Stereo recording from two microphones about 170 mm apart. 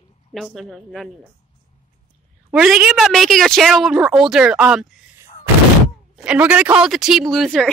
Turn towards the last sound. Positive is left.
turn(degrees=0)  # may be behind; listen again after turning